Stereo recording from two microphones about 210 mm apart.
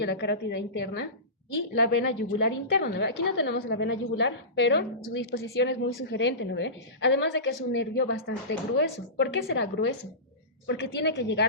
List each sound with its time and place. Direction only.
0.0 s a woman's voice: 50° left (ahead or behind)